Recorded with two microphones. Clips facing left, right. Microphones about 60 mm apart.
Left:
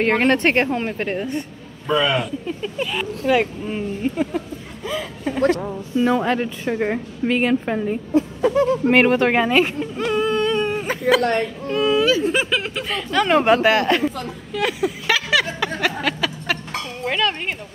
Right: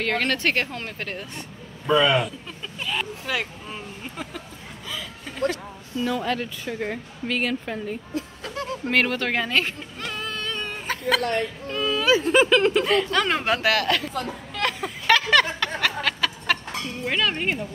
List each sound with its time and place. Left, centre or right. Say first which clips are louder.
0.0 s speech: left 7 dB; left
1.9 s speech: even; centre
2.4 s speech: left 10 dB; centre
2.9 s speech: left 7 dB; centre
3.3 s speech: left 10 dB; centre
5.9 s speech: left 7 dB; left
7.3 s a woman's voice: left 6 dB; left
11.7 s a sound: left 8 dB; centre
12.3 s speech: right 4 dB; centre
13.4 s speech: left 7 dB; left
14.1 s a sound: left 2 dB; centre
17.0 s speech: left 2 dB; centre